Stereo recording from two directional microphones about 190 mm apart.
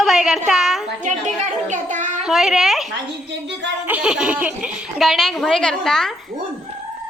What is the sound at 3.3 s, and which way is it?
Speech, 65° right (ahead or behind).